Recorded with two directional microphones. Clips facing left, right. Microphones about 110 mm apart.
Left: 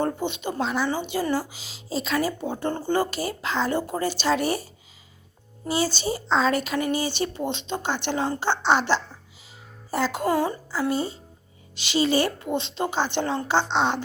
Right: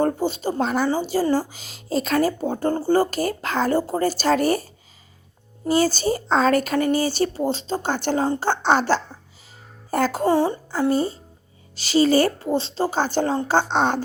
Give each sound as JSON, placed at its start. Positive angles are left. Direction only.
{"t": 0.0, "sound": "a woman's voice", "side_deg": -40}
{"t": 10.7, "sound": "a woman's voice", "side_deg": -40}